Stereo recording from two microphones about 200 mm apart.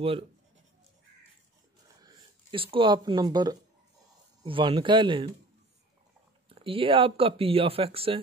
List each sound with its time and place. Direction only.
2.0 s speech: 25° right (ahead or behind)
6.5 s speech: 25° right (ahead or behind)